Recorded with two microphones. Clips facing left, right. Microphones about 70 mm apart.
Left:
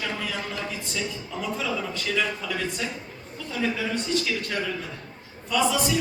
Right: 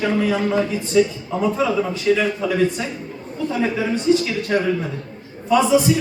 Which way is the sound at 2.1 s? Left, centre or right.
Right.